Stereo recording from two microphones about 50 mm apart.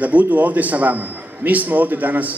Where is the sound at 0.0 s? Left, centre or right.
Right.